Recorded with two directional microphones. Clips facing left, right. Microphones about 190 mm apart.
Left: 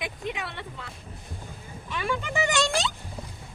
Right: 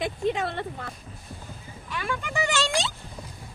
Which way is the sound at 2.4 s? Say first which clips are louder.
Left 1 dB; 15° left (ahead or behind).